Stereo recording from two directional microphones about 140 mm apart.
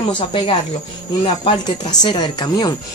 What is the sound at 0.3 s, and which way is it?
Speech, 40° left (ahead or behind).